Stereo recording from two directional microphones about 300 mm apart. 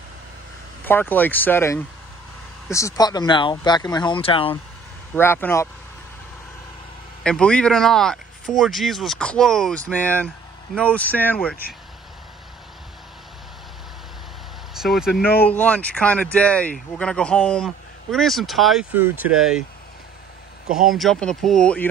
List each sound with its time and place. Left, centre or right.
0.8 s speech: centre
5.1 s speech: centre
7.2 s speech: centre
14.7 s speech: centre
20.6 s speech: right
20.9 s speech: centre